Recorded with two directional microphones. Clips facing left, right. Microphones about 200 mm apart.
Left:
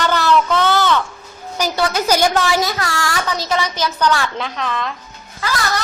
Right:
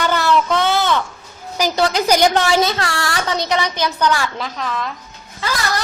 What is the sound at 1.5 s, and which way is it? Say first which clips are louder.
A woman's voice: right 2 dB; 15° right (ahead or behind).